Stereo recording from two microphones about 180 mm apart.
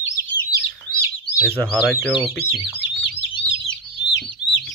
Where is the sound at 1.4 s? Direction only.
5° left (ahead or behind).